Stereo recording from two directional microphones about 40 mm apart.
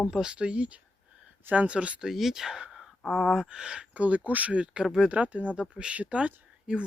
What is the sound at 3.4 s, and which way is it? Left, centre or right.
Speech, right.